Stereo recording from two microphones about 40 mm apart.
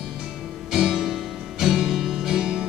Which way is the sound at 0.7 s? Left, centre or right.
Centre.